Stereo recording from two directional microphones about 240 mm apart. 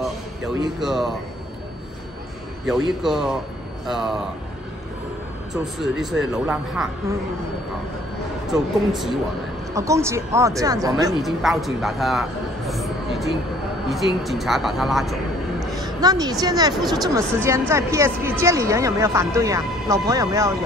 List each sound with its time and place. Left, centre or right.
0.7 s speech: centre
2.9 s speech: centre
5.5 s speech: centre
8.5 s speech: centre
9.8 s speech: centre
11.1 s a man's voice: centre
16.0 s speech: centre